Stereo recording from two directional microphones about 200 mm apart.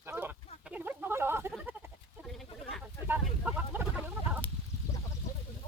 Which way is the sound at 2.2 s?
Centre (ahead or behind).